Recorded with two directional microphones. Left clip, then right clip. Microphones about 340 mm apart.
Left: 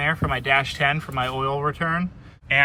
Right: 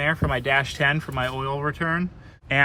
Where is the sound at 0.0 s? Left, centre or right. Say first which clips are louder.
Even; centre.